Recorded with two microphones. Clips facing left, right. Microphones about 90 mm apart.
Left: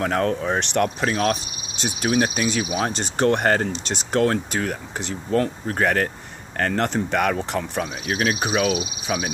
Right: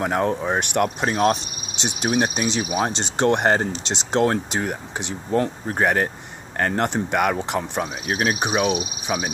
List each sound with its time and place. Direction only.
0.0 s speech: 15° right (ahead or behind)